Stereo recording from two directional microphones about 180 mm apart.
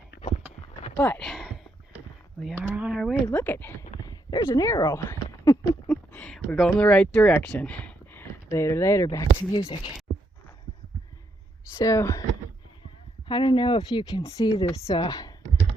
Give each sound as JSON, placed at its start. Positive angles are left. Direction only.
{"t": 0.9, "sound": "a sound", "side_deg": 10}
{"t": 2.6, "sound": "speech", "side_deg": -5}
{"t": 3.3, "sound": "speech", "side_deg": 10}
{"t": 5.0, "sound": "a sound", "side_deg": 15}
{"t": 5.9, "sound": "speech", "side_deg": 5}
{"t": 11.7, "sound": "speech", "side_deg": 15}
{"t": 13.2, "sound": "speech", "side_deg": 25}